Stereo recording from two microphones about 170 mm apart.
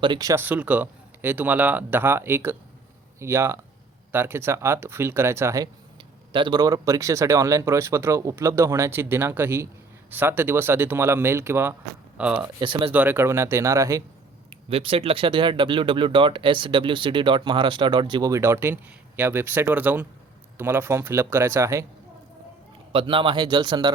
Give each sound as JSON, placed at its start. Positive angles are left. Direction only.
{"t": 0.0, "sound": "speech", "side_deg": -25}
{"t": 6.3, "sound": "speech", "side_deg": -25}
{"t": 12.5, "sound": "speech", "side_deg": -30}
{"t": 12.9, "sound": "speech", "side_deg": -10}
{"t": 14.5, "sound": "speech", "side_deg": -35}
{"t": 22.9, "sound": "speech", "side_deg": -30}